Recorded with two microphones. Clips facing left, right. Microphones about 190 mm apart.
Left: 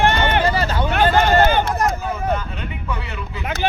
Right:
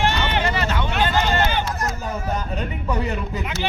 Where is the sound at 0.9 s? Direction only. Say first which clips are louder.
Left 7 dB; 55° left (ahead or behind).